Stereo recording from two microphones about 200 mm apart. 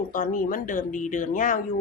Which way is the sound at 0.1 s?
40° left (ahead or behind).